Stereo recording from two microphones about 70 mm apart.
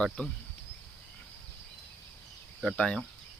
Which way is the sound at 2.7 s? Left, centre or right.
Centre.